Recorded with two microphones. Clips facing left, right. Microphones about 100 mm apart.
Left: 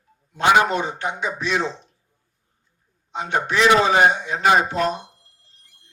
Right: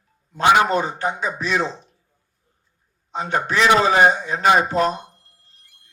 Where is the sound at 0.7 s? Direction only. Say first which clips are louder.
Right 3 dB; 40° right (ahead or behind).